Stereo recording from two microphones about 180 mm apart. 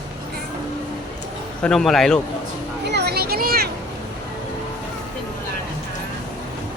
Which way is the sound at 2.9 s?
65° right (ahead or behind).